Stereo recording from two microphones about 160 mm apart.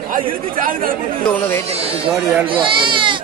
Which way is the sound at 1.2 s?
10° left (ahead or behind).